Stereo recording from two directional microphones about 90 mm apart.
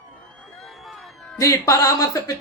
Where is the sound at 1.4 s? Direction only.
35° left (ahead or behind).